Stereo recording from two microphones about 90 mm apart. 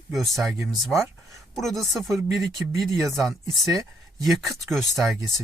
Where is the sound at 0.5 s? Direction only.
30° right (ahead or behind).